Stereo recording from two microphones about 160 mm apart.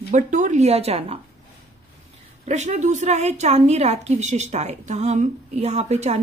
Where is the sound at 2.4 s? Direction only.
45° right (ahead or behind).